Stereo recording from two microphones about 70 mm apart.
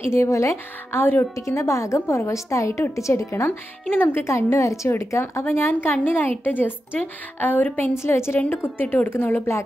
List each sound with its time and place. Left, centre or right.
0.1 s a woman's voice: left
0.9 s a woman's voice: left
1.3 s a woman's voice: left